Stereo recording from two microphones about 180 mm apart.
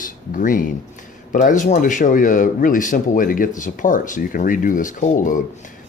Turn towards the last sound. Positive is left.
turn(degrees=45)  # may be behind; listen again after turning